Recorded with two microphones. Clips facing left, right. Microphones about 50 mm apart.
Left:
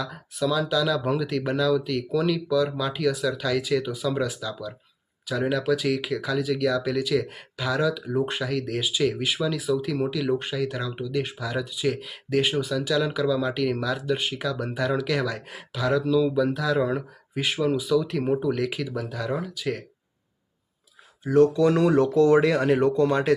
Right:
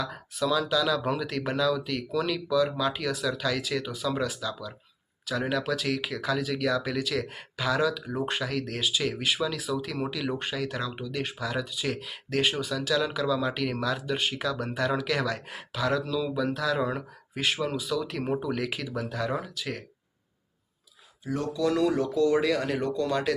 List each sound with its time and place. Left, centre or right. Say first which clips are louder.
0.0 s speech: left 2 dB; centre
21.2 s speech: left 9 dB; left